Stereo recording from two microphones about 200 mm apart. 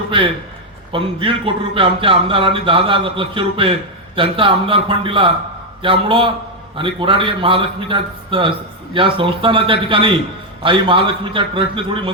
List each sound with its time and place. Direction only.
0.9 s speech: 25° right (ahead or behind)